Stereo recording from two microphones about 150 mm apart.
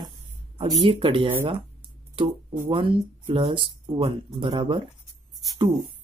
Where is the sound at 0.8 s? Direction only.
35° right (ahead or behind).